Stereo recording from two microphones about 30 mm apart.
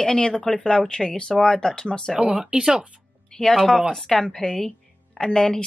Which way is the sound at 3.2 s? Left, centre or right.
Centre.